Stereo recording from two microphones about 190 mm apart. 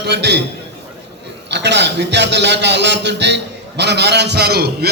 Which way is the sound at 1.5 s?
65° right (ahead or behind).